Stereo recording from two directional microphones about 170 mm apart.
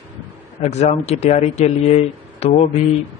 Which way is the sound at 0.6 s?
40° left (ahead or behind).